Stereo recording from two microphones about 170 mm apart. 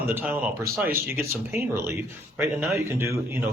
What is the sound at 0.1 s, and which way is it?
Speech, 10° right (ahead or behind).